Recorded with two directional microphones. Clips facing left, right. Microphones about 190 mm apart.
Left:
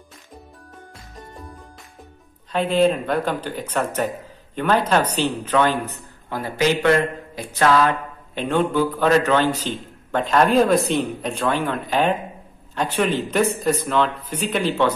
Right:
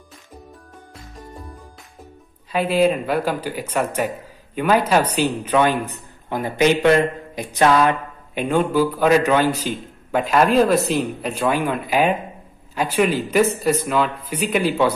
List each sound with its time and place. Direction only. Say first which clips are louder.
2.5 s a man's voice: even; 10° right (ahead or behind)